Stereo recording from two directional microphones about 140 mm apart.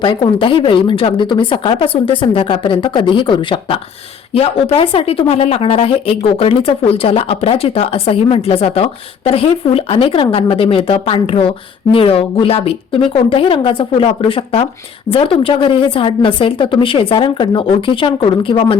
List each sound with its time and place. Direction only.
0.0 s a woman's voice: 35° left (ahead or behind)